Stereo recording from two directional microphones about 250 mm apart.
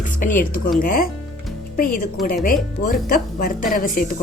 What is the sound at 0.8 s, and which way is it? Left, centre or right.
A woman's voice, left.